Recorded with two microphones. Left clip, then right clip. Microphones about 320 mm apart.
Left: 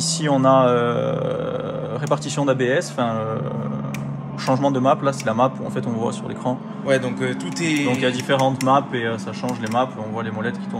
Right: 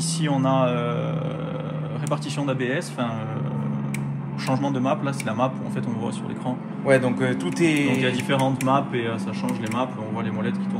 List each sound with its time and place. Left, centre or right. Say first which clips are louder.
0.2 s speech: left 7 dB; left
4.5 s speech: left 6 dB; left
6.9 s speech: right 1 dB; centre
7.9 s speech: left 3 dB; left